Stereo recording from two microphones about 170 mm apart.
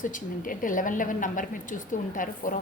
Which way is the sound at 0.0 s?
50° left (ahead or behind).